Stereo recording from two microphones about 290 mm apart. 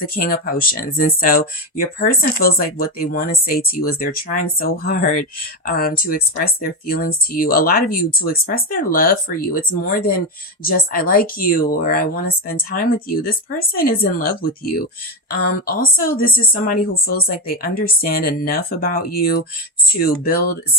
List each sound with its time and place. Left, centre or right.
0.1 s speech: left
12.5 s a woman's voice: left